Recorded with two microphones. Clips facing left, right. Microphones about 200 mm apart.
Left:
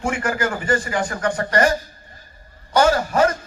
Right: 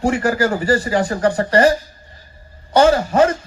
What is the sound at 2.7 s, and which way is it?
Speech, 30° right (ahead or behind).